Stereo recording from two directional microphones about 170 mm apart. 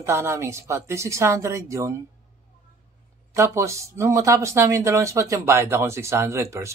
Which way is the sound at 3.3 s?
20° right (ahead or behind).